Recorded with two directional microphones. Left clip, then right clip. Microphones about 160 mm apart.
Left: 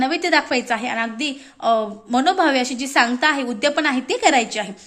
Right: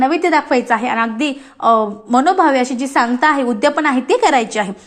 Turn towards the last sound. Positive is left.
turn(degrees=0)  # may be behind; listen again after turning